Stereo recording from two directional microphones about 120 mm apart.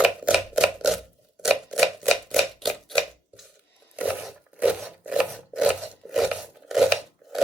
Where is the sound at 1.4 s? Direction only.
Centre (ahead or behind).